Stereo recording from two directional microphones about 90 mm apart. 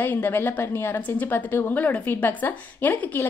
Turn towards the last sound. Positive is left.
turn(degrees=20)  # may be behind; listen again after turning